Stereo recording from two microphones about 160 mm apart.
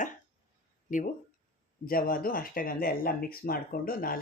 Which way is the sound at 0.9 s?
55° left (ahead or behind).